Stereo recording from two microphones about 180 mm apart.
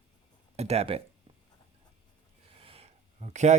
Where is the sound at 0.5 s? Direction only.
35° right (ahead or behind).